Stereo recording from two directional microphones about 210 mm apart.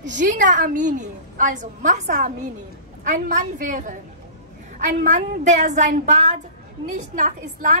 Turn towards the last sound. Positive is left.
turn(degrees=-40)  # may be behind; listen again after turning